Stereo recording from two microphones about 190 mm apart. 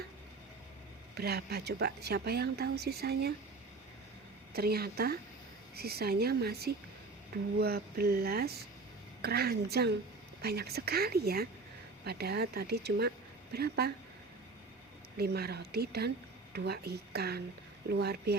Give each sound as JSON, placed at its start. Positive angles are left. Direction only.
{"t": 1.1, "sound": "speech", "side_deg": -55}
{"t": 4.5, "sound": "a woman's voice", "side_deg": -55}
{"t": 15.2, "sound": "speech", "side_deg": -55}